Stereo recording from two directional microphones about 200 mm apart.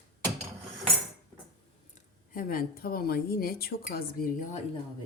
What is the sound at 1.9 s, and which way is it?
Speech, 45° left (ahead or behind).